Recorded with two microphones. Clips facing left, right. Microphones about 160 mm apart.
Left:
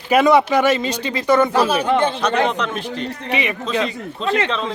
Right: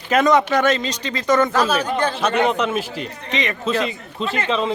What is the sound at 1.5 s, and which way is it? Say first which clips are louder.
Speech: left 2 dB; 30° left (ahead or behind).